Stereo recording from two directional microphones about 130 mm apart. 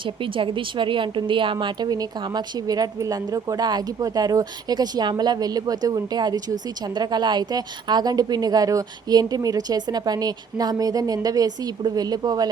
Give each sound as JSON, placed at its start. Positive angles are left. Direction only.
{"t": 0.0, "sound": "a woman's voice", "side_deg": -40}